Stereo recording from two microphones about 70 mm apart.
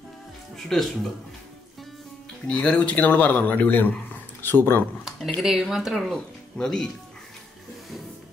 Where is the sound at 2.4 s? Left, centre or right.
Centre; by 4.9 s left.